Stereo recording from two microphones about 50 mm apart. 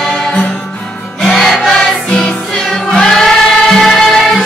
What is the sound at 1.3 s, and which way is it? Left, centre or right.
Music, centre.